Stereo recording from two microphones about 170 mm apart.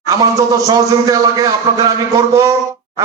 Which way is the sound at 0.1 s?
20° right (ahead or behind).